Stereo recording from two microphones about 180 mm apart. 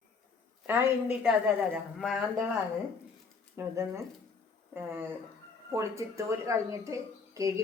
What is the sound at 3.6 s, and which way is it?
A woman's voice, 15° right (ahead or behind).